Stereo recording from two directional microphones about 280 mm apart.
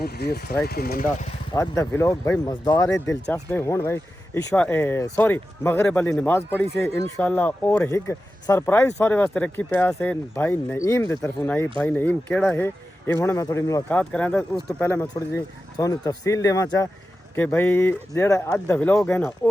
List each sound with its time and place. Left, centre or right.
0.0 s speech: left
1.5 s speech: centre